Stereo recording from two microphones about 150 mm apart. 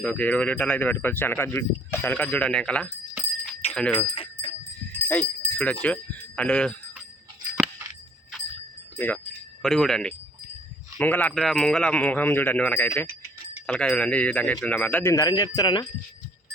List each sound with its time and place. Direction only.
0.0 s speech: 10° left (ahead or behind)
4.1 s jingle bell: 35° left (ahead or behind)
4.9 s jingle bell: 10° left (ahead or behind)
5.8 s speech: 10° left (ahead or behind)
9.0 s speech: 10° left (ahead or behind); by 15.8 s 25° left (ahead or behind)